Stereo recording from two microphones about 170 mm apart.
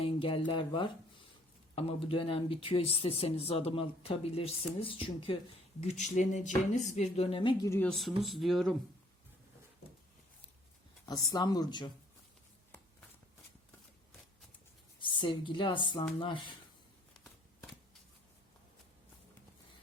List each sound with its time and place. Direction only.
0.0 s speech: 30° left (ahead or behind)
5.8 s speech: 40° left (ahead or behind)
7.7 s speech: 5° left (ahead or behind)
11.0 s speech: 20° left (ahead or behind)
15.0 s speech: 30° left (ahead or behind)